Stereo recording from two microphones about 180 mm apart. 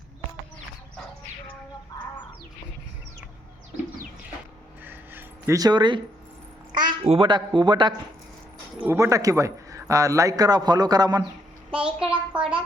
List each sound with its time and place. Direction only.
4.9 s dog: 15° right (ahead or behind)
6.7 s speech: 30° right (ahead or behind)
8.8 s a man's voice: 15° right (ahead or behind)
11.7 s a sound: 5° right (ahead or behind)